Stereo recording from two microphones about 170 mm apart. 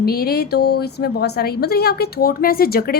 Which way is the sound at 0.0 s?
65° left (ahead or behind).